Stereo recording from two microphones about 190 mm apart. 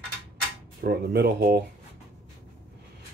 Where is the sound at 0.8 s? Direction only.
60° right (ahead or behind).